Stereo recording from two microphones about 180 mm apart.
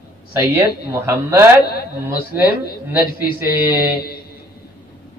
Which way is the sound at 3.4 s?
10° right (ahead or behind).